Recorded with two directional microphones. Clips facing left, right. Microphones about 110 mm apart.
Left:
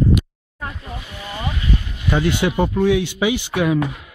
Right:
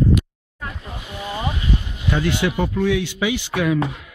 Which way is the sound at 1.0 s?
20° right (ahead or behind).